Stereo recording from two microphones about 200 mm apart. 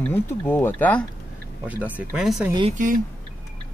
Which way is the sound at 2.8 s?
40° right (ahead or behind).